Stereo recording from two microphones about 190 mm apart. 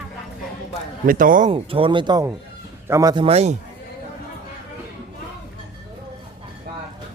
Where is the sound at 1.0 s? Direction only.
45° right (ahead or behind).